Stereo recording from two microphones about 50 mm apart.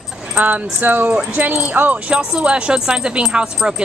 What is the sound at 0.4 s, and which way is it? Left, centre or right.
Speech, right.